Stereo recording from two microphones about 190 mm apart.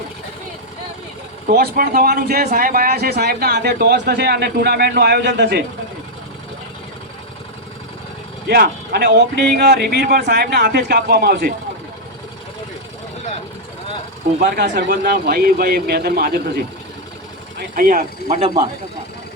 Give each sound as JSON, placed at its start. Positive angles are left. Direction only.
{"t": 1.5, "sound": "speech", "side_deg": -55}
{"t": 8.4, "sound": "speech", "side_deg": -55}
{"t": 14.3, "sound": "speech", "side_deg": -55}
{"t": 17.7, "sound": "speech", "side_deg": -50}